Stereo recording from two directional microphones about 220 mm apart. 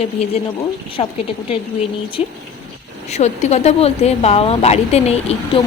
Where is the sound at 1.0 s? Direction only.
25° left (ahead or behind).